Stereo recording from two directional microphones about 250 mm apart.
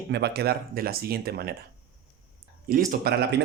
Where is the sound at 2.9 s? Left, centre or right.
Right.